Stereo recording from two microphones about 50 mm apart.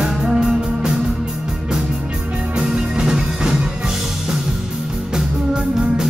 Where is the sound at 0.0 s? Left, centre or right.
Centre.